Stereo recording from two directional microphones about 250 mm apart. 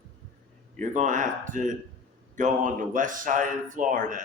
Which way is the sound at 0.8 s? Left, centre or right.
Right.